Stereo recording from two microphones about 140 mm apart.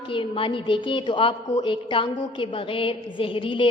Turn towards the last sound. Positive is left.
turn(degrees=35)  # may be behind; listen again after turning